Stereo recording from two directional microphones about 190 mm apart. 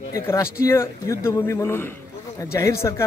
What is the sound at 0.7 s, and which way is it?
A man's voice, 15° left (ahead or behind).